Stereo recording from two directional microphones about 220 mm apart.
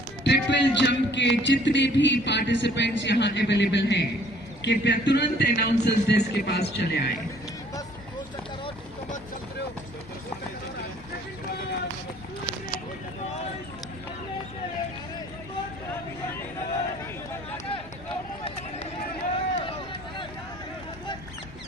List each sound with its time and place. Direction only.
0.2 s a man's voice: 50° left (ahead or behind)
19.3 s run: 25° left (ahead or behind)